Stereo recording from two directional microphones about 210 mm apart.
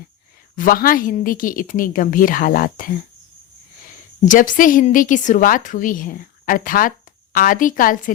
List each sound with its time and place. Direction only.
0.5 s a woman's voice: 40° left (ahead or behind)
4.3 s a woman's voice: 40° left (ahead or behind)